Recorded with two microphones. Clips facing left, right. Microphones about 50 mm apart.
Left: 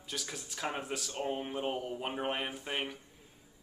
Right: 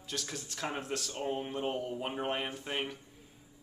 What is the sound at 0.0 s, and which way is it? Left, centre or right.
A man's voice, centre.